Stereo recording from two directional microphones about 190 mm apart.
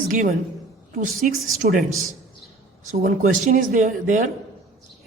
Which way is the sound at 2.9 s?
45° right (ahead or behind).